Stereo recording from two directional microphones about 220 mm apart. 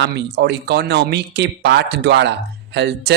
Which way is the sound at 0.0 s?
50° right (ahead or behind).